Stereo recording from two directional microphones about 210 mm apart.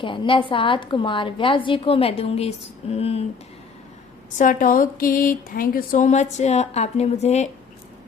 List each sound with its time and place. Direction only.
0.0 s a woman's voice: 25° left (ahead or behind)
4.4 s speech: 40° left (ahead or behind)